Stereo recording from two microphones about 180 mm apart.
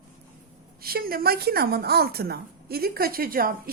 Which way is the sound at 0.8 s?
55° right (ahead or behind).